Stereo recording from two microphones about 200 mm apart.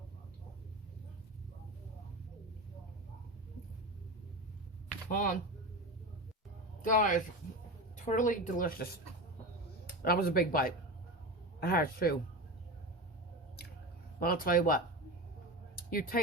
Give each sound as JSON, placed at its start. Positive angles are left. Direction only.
{"t": 5.0, "sound": "speech", "side_deg": 45}
{"t": 6.9, "sound": "a woman's voice", "side_deg": 40}
{"t": 10.0, "sound": "speech", "side_deg": 50}
{"t": 14.2, "sound": "speech", "side_deg": 45}
{"t": 15.7, "sound": "a sound", "side_deg": 50}